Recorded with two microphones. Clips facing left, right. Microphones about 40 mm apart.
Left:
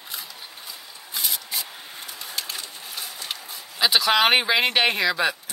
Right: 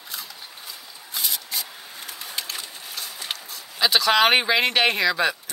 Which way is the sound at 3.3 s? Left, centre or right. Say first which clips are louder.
Right 2 dB; right.